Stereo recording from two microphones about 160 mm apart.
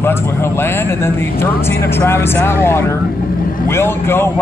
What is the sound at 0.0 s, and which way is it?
A man's voice, 15° left (ahead or behind).